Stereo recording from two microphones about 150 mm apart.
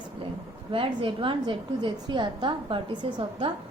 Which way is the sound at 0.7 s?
35° right (ahead or behind).